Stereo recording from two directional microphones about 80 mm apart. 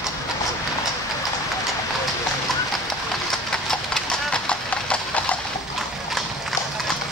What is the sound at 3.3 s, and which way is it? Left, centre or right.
Clip-clop, centre.